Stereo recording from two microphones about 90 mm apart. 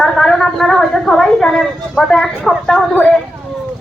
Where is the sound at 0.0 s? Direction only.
5° left (ahead or behind).